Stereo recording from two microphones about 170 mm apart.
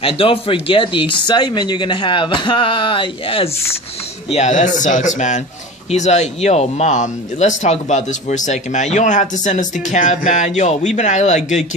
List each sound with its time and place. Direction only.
0.0 s speech: 35° left (ahead or behind)
4.3 s speech: 40° left (ahead or behind)